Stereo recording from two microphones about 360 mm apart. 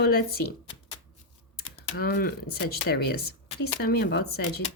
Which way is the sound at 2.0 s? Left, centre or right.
Left.